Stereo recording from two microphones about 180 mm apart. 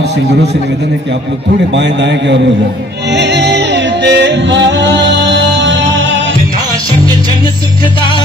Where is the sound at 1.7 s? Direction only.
80° right.